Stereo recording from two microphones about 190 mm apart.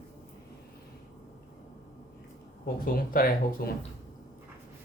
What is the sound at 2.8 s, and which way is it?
Speech, 50° left (ahead or behind).